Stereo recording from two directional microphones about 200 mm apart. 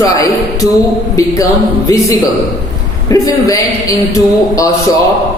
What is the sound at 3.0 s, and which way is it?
Speech, 15° left (ahead or behind).